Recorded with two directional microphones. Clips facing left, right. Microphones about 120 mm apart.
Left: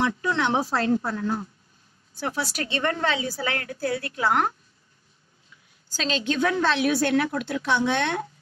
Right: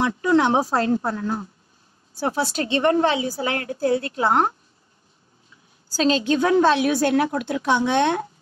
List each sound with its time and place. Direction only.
0.3 s a woman's voice: 40° right (ahead or behind)
1.1 s a woman's voice: 25° right (ahead or behind)
5.9 s a woman's voice: 35° right (ahead or behind)
7.4 s a woman's voice: 20° right (ahead or behind)